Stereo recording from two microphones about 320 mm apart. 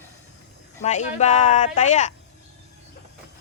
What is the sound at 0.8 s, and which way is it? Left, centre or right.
Speech, left.